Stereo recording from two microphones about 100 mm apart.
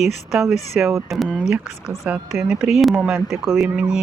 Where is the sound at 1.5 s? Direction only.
25° right (ahead or behind).